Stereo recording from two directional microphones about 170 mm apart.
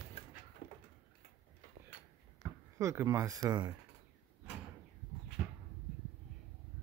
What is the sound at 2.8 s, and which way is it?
Speech, 15° right (ahead or behind).